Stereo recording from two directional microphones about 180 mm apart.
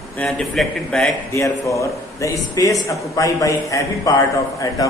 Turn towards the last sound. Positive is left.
turn(degrees=20)  # may be behind; listen again after turning